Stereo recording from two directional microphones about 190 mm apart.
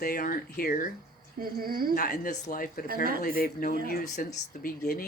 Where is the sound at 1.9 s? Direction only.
45° left (ahead or behind).